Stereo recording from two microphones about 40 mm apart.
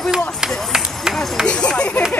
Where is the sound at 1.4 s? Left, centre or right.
Left.